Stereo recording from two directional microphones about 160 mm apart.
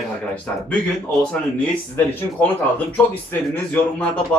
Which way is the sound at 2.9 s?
10° left (ahead or behind).